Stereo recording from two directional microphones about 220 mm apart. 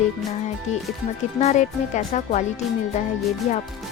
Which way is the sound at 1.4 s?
30° left (ahead or behind).